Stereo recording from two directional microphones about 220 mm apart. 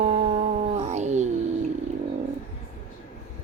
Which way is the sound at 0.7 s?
30° right (ahead or behind).